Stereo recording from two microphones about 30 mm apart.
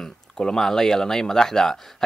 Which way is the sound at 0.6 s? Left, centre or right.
Centre.